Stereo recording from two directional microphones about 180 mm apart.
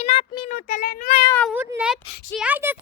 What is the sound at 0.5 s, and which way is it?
Speech, 55° left (ahead or behind).